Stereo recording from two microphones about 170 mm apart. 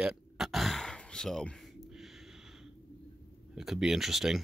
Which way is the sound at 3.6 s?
Centre (ahead or behind).